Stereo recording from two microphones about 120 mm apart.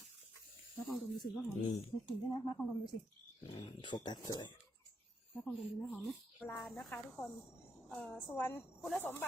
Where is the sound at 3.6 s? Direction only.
40° left (ahead or behind).